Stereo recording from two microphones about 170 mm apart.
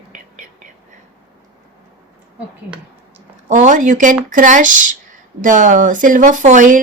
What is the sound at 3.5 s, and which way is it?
A woman's voice, 45° right (ahead or behind).